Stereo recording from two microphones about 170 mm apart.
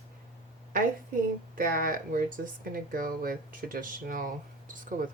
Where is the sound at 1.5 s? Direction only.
55° right (ahead or behind).